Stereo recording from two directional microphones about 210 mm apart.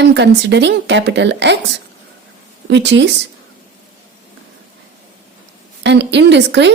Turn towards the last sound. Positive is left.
turn(degrees=-55)  # may be behind; listen again after turning